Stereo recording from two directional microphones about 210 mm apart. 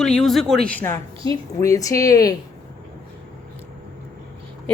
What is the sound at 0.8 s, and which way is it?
A woman's voice, 15° left (ahead or behind).